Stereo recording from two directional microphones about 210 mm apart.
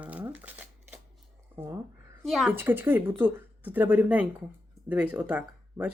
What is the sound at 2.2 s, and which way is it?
Speech, centre (ahead or behind).